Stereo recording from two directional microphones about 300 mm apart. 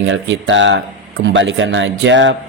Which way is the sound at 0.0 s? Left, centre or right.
Right.